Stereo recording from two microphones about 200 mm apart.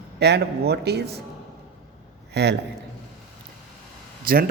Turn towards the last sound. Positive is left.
turn(degrees=-45)  # may be behind; listen again after turning